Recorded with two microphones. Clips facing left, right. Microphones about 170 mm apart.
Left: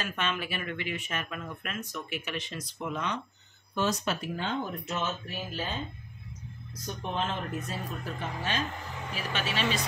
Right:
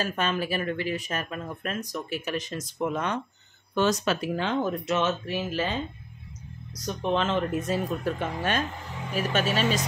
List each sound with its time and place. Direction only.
0.0 s speech: 40° right (ahead or behind)
3.7 s speech: 80° right; by 8.6 s 60° right (ahead or behind)
9.1 s speech: 45° right (ahead or behind)